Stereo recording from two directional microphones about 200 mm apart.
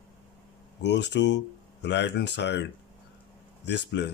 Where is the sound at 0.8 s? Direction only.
60° left (ahead or behind).